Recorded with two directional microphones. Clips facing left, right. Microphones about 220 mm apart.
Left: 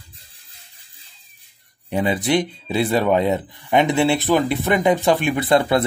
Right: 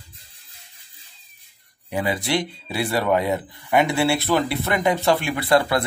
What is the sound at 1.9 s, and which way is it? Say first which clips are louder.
Speech: left 4 dB; 20° left (ahead or behind).